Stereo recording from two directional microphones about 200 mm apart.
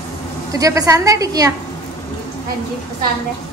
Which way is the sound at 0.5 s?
15° right (ahead or behind).